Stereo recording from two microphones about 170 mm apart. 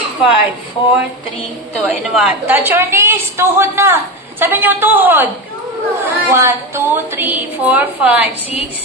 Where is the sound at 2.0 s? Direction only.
5° right (ahead or behind).